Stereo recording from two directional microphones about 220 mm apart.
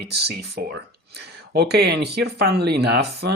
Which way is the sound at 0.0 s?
50° right (ahead or behind).